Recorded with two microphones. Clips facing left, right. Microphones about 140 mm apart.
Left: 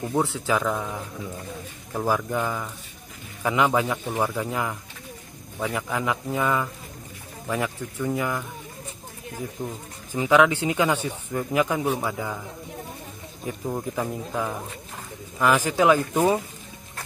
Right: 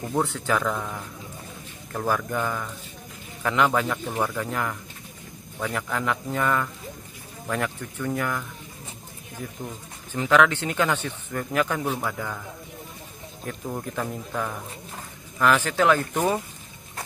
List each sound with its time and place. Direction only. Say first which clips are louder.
0.0 s speech: left 1 dB; 5° left (ahead or behind)
9.6 s speech: left 3 dB; 15° left (ahead or behind)
13.5 s speech: left 3 dB; 10° left (ahead or behind)